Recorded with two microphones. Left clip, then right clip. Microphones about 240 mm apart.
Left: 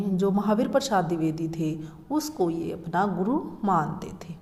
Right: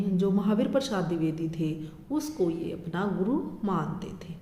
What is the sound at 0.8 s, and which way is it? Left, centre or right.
Speech, centre.